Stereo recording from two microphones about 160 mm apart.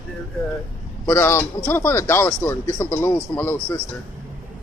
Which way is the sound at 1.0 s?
15° left (ahead or behind).